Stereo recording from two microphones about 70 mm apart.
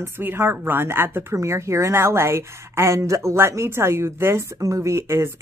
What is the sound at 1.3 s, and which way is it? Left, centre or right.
Speech, right.